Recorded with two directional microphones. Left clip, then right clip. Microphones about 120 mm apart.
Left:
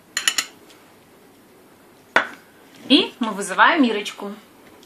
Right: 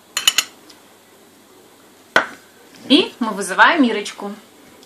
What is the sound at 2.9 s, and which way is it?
A woman's voice, 5° left (ahead or behind).